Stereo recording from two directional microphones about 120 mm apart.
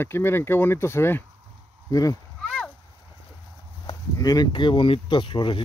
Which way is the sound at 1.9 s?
30° left (ahead or behind).